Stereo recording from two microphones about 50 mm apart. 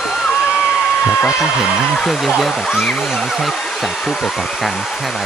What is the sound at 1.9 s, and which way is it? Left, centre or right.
Speech, centre.